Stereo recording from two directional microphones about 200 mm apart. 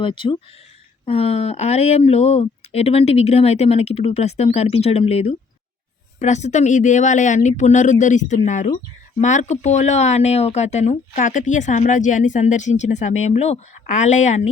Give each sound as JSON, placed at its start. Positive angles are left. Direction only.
{"t": 0.0, "sound": "speech", "side_deg": 25}